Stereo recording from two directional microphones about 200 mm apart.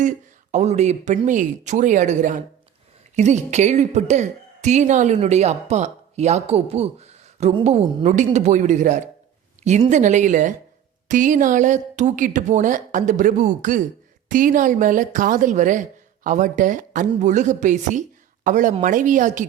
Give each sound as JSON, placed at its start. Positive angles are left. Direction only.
{"t": 0.5, "sound": "a woman's voice", "side_deg": -35}